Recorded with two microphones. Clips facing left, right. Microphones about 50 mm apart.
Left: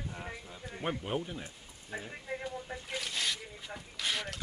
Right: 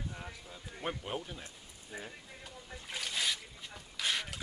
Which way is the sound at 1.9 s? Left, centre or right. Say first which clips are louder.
Left 3 dB; left.